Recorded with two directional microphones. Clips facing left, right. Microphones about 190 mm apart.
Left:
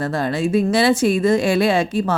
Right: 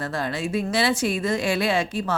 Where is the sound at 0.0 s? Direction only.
45° left (ahead or behind).